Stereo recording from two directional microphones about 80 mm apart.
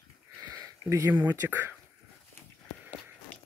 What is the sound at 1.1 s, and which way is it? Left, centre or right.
Speech, right.